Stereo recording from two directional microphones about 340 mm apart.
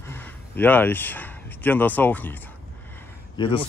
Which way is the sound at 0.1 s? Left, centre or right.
Centre.